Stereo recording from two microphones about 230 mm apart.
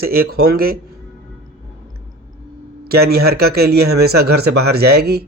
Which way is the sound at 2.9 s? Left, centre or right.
Right.